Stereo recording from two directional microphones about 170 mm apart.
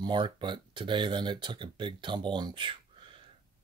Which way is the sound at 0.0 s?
25° right (ahead or behind).